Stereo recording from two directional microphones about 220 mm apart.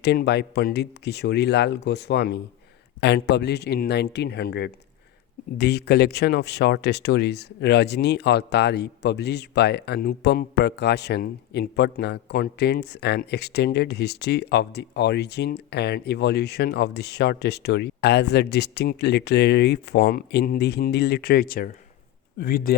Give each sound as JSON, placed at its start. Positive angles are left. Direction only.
{"t": 0.0, "sound": "speech", "side_deg": 50}